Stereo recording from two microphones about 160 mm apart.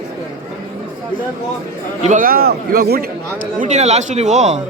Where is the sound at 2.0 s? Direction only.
55° right (ahead or behind); by 3.0 s 70° right (ahead or behind).